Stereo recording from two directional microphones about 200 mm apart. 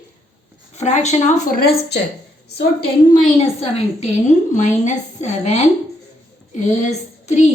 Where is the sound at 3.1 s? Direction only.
35° left (ahead or behind).